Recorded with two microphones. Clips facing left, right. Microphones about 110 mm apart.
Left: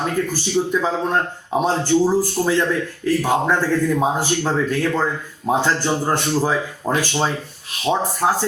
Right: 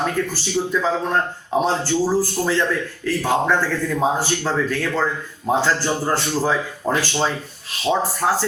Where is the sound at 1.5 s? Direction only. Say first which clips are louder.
Left 2 dB; 15° left (ahead or behind).